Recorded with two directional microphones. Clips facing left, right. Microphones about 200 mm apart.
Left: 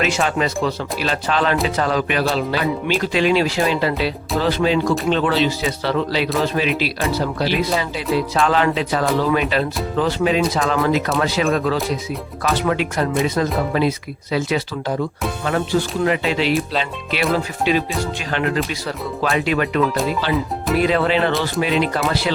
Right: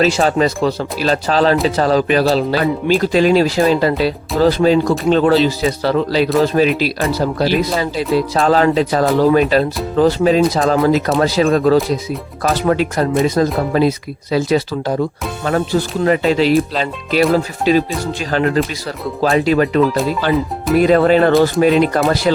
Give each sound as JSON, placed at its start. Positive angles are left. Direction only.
{"t": 0.0, "sound": "speech", "side_deg": -35}
{"t": 16.0, "sound": "speech", "side_deg": -40}
{"t": 20.2, "sound": "speech", "side_deg": -45}